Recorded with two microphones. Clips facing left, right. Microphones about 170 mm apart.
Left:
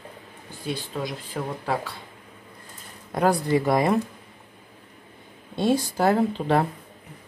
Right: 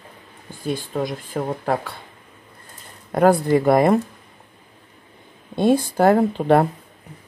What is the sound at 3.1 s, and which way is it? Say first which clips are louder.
Speech: right 6 dB; 55° right (ahead or behind).